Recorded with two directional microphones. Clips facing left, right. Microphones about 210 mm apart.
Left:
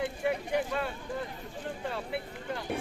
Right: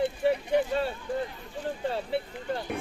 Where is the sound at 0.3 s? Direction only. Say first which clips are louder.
Right 5 dB; 30° right (ahead or behind).